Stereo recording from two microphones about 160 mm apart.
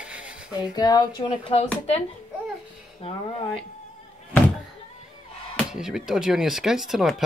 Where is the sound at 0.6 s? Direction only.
25° left (ahead or behind).